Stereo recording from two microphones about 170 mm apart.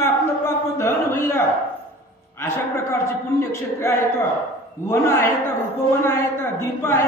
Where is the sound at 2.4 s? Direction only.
15° left (ahead or behind).